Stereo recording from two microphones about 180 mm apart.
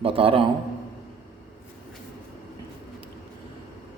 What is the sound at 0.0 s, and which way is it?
Speech, 30° right (ahead or behind).